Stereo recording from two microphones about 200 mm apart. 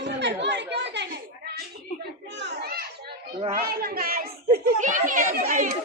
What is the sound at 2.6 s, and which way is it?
Children playing, 50° right (ahead or behind).